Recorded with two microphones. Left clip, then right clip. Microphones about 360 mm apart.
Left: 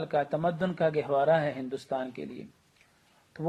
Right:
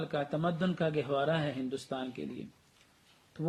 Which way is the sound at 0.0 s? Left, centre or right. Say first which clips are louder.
Left 5 dB; left.